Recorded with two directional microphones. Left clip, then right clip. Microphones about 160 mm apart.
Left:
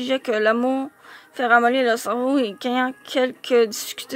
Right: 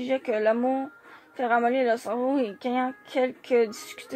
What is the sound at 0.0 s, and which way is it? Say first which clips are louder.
Speech: left 4 dB; 45° left (ahead or behind).